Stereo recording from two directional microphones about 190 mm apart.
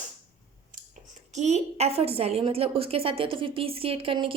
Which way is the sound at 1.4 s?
35° right (ahead or behind).